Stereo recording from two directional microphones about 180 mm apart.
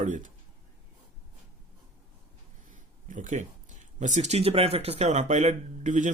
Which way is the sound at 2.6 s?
45° right (ahead or behind).